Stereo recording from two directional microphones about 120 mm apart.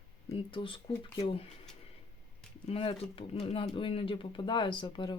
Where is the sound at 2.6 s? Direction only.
55° left (ahead or behind).